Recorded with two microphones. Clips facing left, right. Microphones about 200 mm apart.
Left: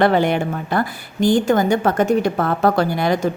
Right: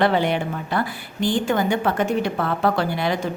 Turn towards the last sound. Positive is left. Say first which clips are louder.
# left 4 dB
turn(degrees=45)  # may be behind; listen again after turning